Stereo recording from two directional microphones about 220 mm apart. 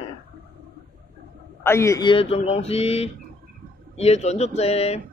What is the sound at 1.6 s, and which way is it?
A man's voice, 10° left (ahead or behind).